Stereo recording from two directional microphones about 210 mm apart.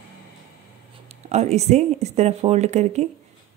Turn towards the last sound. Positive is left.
turn(degrees=-35)  # may be behind; listen again after turning